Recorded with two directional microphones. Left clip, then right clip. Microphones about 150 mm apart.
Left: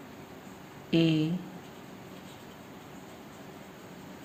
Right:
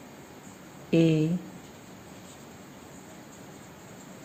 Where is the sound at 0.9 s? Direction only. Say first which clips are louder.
Right 3 dB; 90° right.